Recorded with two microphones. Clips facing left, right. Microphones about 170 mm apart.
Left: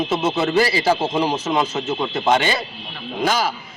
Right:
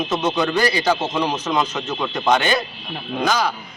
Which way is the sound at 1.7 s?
25° left (ahead or behind).